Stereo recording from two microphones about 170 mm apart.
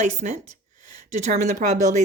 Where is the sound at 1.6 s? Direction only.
45° right (ahead or behind).